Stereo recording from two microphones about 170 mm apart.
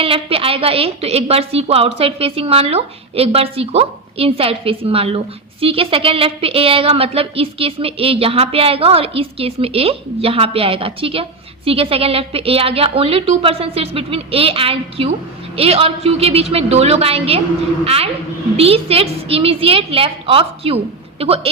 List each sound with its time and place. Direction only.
0.0 s a woman's voice: 35° right (ahead or behind)